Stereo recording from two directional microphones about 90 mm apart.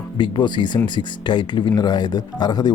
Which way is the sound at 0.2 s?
60° left (ahead or behind).